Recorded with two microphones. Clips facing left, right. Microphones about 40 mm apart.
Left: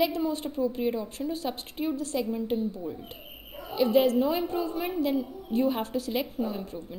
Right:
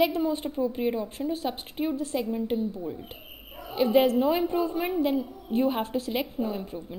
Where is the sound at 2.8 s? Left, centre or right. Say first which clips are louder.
Right 1 dB; centre.